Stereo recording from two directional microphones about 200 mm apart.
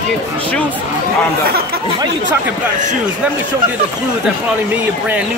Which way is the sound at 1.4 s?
50° right (ahead or behind).